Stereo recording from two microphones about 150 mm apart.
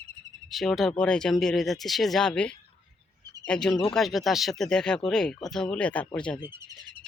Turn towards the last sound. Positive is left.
turn(degrees=5)  # may be behind; listen again after turning